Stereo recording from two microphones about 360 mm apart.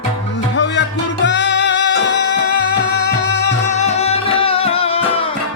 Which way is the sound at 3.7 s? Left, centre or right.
Centre.